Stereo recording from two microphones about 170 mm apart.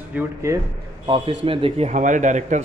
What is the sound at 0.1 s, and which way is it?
Speech, 15° right (ahead or behind).